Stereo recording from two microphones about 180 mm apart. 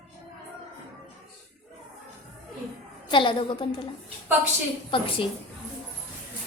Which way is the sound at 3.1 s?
25° left (ahead or behind).